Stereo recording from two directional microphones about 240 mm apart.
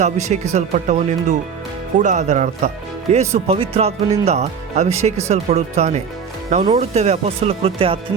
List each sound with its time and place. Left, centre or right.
0.0 s speech: right